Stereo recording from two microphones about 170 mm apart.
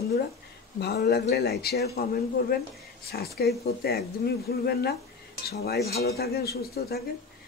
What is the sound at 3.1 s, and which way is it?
A man's voice, 65° left (ahead or behind).